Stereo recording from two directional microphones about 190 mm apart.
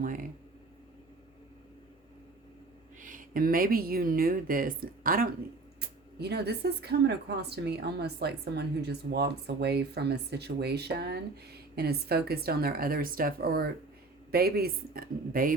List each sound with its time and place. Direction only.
0.0 s speech: 45° right (ahead or behind)
3.0 s speech: 45° right (ahead or behind)
6.1 s a woman's voice: 60° right (ahead or behind)